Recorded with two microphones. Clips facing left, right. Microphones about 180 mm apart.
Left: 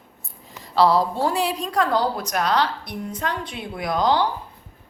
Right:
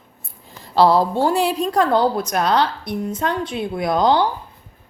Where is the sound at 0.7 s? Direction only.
30° right (ahead or behind).